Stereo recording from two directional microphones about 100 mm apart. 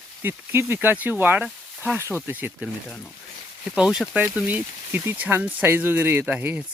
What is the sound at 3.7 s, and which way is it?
Speech, 10° right (ahead or behind).